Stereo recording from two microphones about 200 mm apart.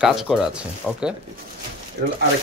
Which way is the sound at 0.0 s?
Centre (ahead or behind).